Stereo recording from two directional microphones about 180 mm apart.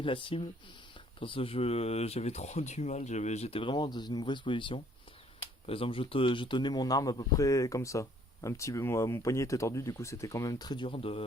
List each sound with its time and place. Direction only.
0.0 s a man's voice: 30° left (ahead or behind)